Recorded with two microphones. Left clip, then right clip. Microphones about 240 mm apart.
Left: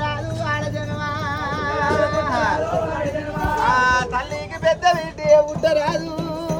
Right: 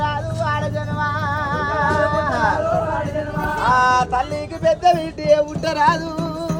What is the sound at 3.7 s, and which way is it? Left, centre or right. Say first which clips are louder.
Music: right 3 dB; centre.